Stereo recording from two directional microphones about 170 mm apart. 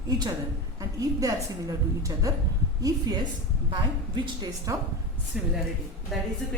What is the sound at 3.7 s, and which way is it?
A woman's voice, 25° right (ahead or behind).